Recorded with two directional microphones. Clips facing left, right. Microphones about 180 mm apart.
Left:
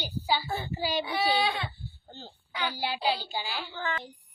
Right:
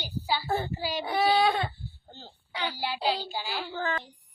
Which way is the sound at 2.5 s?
30° right (ahead or behind).